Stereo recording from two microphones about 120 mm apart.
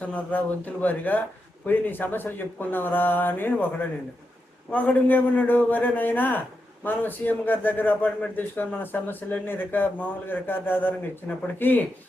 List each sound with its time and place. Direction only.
0.0 s a man's voice: 10° left (ahead or behind)
4.7 s a man's voice: 15° left (ahead or behind)